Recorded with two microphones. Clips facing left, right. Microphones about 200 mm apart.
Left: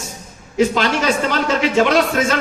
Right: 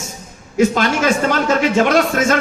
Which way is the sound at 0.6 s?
50° right (ahead or behind).